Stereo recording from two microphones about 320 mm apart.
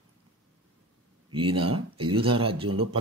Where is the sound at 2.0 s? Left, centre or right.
Centre.